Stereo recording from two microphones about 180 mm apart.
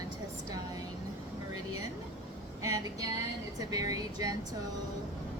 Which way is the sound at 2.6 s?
20° right (ahead or behind).